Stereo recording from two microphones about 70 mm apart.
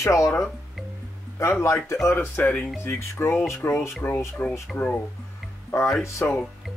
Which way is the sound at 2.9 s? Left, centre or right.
Left.